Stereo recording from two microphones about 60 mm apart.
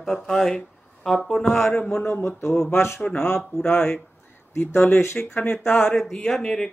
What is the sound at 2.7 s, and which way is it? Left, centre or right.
Speech, left.